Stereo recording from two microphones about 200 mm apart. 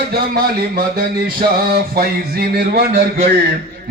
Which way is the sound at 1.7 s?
50° right (ahead or behind).